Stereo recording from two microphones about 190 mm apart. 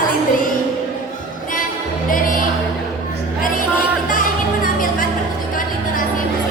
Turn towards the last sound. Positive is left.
turn(degrees=45)  # may be behind; listen again after turning